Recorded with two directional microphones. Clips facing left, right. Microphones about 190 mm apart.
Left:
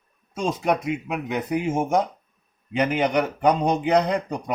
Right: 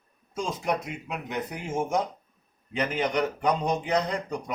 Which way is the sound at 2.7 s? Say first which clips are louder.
Left 5 dB; 70° left (ahead or behind).